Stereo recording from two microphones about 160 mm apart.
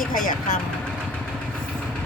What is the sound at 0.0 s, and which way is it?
Speech, 55° left (ahead or behind).